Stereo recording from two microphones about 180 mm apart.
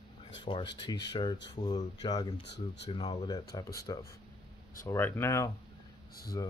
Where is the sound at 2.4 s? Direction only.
70° left (ahead or behind).